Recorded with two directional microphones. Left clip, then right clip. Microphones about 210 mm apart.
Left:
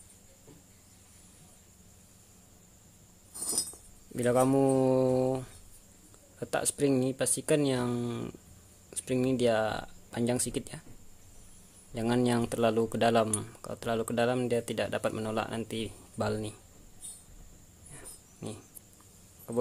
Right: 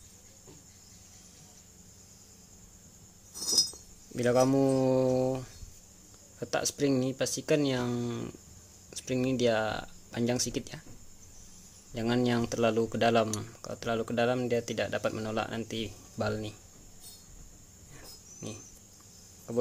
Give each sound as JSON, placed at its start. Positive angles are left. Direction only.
{"t": 3.3, "sound": "chink", "side_deg": 0}
{"t": 4.1, "sound": "speech", "side_deg": 0}
{"t": 11.9, "sound": "speech", "side_deg": 5}